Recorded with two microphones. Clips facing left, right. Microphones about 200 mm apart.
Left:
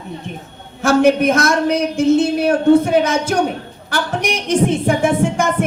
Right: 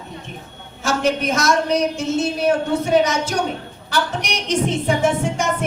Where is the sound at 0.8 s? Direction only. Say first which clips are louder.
Left 8 dB; 55° left (ahead or behind).